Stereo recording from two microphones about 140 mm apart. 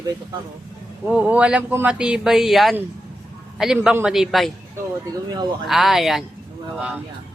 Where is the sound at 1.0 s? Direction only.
10° right (ahead or behind).